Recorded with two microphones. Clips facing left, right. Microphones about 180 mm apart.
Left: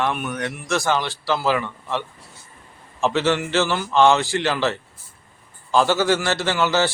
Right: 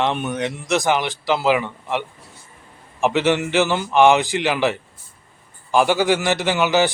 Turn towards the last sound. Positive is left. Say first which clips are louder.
# right 2 dB
turn(degrees=-15)  # may be behind; listen again after turning